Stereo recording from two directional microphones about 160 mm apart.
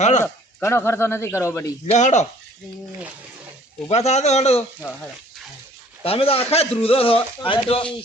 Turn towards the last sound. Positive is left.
turn(degrees=35)  # may be behind; listen again after turning